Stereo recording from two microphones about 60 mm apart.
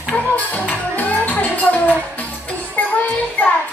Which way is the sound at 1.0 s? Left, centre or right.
Left.